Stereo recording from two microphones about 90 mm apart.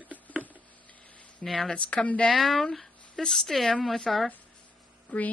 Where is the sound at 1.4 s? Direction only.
5° left (ahead or behind).